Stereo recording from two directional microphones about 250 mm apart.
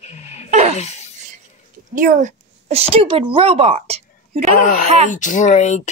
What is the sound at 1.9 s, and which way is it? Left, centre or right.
Speech, right.